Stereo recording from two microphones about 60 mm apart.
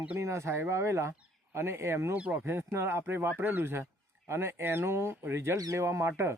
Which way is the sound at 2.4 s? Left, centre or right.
Right.